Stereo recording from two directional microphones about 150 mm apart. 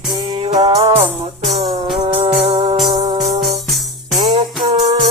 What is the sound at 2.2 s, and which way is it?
Music, 40° right (ahead or behind).